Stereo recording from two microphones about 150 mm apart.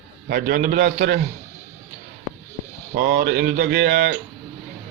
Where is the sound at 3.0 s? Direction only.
85° right.